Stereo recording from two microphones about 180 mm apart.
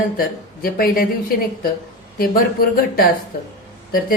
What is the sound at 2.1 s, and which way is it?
Speech, 55° left (ahead or behind).